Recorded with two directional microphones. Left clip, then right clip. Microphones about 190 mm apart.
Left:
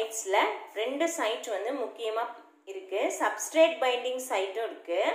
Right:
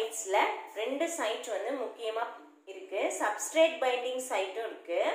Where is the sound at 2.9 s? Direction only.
25° left (ahead or behind).